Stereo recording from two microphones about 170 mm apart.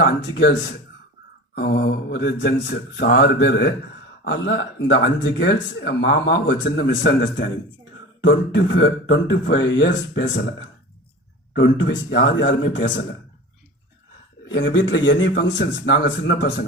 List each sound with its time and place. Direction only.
0.0 s a man's voice: 85° left
1.5 s speech: 70° left (ahead or behind)
4.2 s speech: 90° left
11.5 s speech: 90° left
14.5 s speech: 90° left